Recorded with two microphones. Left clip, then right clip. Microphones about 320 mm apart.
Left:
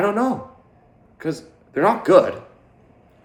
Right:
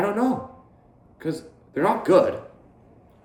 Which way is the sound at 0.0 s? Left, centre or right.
Centre.